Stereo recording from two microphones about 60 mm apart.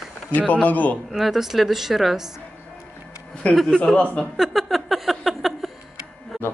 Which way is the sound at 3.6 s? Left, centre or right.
Centre.